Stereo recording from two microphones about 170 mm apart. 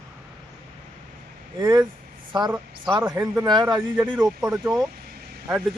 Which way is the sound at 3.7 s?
5° right (ahead or behind).